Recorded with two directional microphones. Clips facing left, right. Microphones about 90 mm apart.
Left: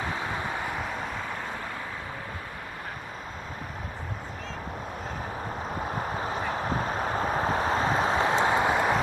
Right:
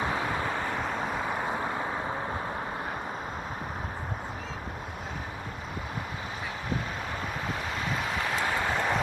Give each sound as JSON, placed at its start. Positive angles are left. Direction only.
{"t": 6.3, "sound": "vehicle", "side_deg": 40}